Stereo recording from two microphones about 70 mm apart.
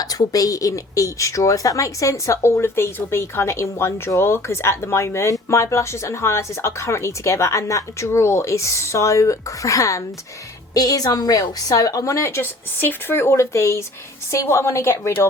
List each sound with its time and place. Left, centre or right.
0.0 s a woman's voice: left